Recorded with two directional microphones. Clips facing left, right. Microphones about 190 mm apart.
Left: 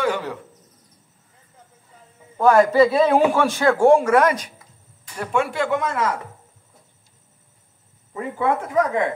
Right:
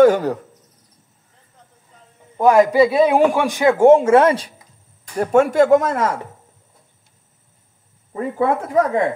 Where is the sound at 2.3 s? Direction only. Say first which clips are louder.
Right 2 dB; 15° right (ahead or behind).